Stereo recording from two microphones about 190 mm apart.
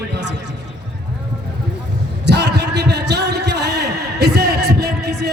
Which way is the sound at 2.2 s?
60° right (ahead or behind).